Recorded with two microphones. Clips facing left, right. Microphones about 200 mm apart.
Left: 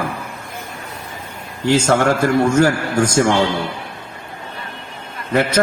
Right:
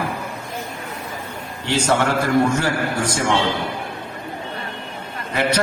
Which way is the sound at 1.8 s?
45° left (ahead or behind).